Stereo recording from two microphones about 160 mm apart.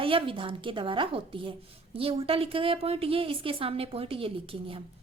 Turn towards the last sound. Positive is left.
turn(degrees=-35)  # may be behind; listen again after turning